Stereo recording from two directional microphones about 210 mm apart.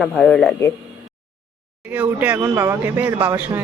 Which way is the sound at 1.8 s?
10° right (ahead or behind).